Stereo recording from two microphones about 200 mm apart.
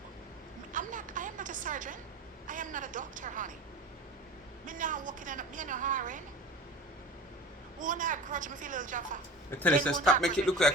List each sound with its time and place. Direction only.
0.7 s a woman's voice: 40° right (ahead or behind)
4.6 s a woman's voice: 40° right (ahead or behind)
7.8 s a woman's voice: 40° right (ahead or behind)
9.6 s speech: 5° left (ahead or behind)